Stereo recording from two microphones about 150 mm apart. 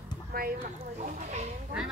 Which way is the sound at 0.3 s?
80° right.